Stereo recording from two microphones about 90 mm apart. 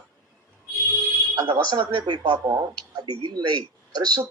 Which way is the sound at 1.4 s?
55° right (ahead or behind).